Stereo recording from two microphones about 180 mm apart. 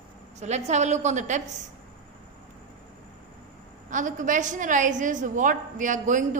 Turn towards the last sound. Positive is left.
turn(degrees=-45)  # may be behind; listen again after turning